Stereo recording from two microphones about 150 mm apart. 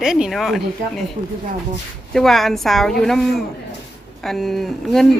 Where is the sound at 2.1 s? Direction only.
5° left (ahead or behind).